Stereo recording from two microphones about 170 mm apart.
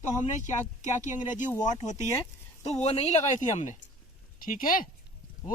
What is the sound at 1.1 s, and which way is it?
Speech, 50° left (ahead or behind).